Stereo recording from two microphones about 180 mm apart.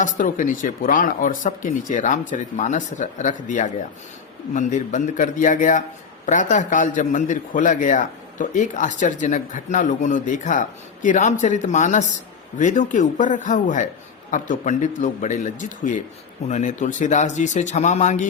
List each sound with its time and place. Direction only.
0.0 s a man's voice: 50° left (ahead or behind)